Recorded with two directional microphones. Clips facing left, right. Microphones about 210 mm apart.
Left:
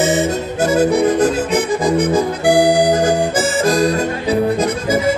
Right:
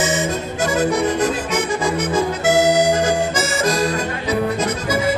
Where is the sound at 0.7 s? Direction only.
35° left (ahead or behind).